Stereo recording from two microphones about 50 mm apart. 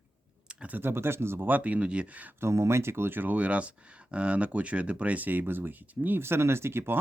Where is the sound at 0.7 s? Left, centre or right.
Right.